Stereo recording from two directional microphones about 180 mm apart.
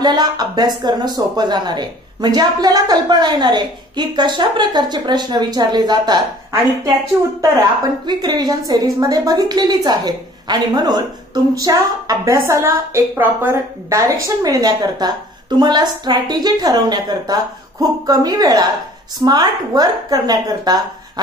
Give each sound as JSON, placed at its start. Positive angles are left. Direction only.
{"t": 0.0, "sound": "speech", "side_deg": -25}